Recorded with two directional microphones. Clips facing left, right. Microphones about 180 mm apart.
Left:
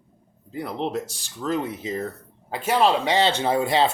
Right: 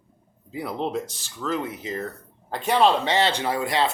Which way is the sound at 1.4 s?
20° left (ahead or behind).